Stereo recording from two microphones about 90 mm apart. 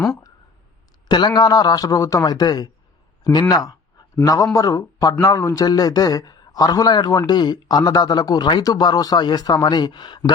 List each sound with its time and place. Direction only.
1.0 s speech: 55° left (ahead or behind)
3.5 s a sound: 45° left (ahead or behind)
4.5 s speech: 40° left (ahead or behind); by 10.3 s 55° left (ahead or behind)